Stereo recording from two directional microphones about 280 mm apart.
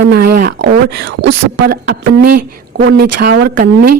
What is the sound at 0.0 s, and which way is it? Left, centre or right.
A woman's voice, right.